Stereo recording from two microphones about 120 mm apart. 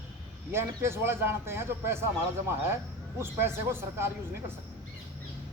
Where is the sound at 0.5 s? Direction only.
20° right (ahead or behind).